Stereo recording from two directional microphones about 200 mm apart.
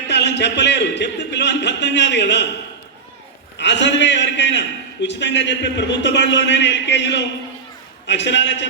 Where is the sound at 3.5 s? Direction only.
60° left (ahead or behind).